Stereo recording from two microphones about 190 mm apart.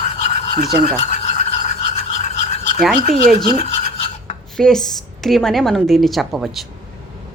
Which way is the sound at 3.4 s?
35° left (ahead or behind).